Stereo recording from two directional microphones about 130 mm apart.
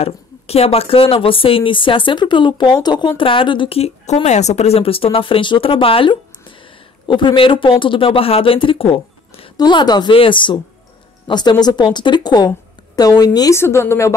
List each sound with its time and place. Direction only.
0.0 s speech: 50° left (ahead or behind)
9.6 s a woman's voice: 35° left (ahead or behind)
13.6 s speech: 20° left (ahead or behind)